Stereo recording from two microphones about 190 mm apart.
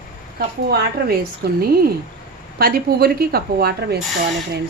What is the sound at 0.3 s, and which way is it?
A woman's voice, 55° right (ahead or behind).